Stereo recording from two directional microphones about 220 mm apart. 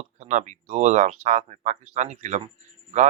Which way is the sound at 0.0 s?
35° right (ahead or behind).